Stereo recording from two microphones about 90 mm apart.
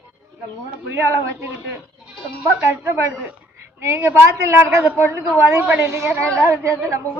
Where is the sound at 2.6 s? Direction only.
30° right (ahead or behind).